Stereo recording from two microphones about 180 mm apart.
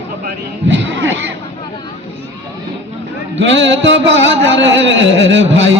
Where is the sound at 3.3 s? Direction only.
90° right.